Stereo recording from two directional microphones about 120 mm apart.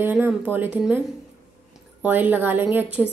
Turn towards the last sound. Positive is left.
turn(degrees=-5)  # may be behind; listen again after turning